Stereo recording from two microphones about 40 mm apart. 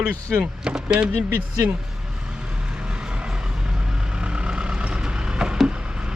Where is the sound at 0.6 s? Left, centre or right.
Right.